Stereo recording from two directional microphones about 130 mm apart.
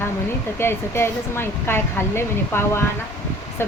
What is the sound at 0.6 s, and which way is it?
Speech, 20° left (ahead or behind).